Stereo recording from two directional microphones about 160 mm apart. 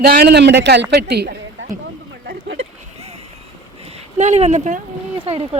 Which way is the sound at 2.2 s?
75° right (ahead or behind).